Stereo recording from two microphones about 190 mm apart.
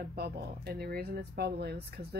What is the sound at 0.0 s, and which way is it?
Speech, 55° right (ahead or behind).